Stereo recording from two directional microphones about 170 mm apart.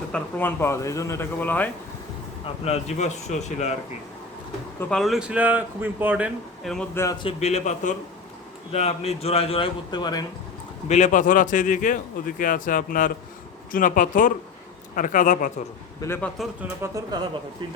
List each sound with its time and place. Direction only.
0.1 s speech: 10° left (ahead or behind)
2.6 s a man's voice: 40° left (ahead or behind)
4.8 s speech: 5° left (ahead or behind)
6.9 s speech: 15° left (ahead or behind)
7.2 s a man's voice: 35° left (ahead or behind)
10.8 s a man's voice: 45° left (ahead or behind)
16.0 s speech: 15° left (ahead or behind)
16.8 s speech: 20° right (ahead or behind)